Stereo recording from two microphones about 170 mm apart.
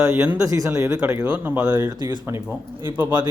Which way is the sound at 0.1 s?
15° right (ahead or behind).